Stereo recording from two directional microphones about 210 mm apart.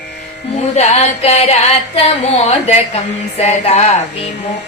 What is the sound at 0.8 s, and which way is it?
Speech, 30° left (ahead or behind).